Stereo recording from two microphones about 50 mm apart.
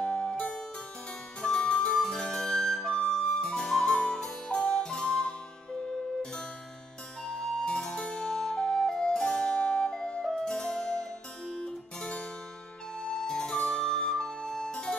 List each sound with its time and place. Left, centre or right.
0.0 s music: centre
3.0 s flute: centre
7.2 s flute: centre
10.2 s music: centre
13.0 s flute: centre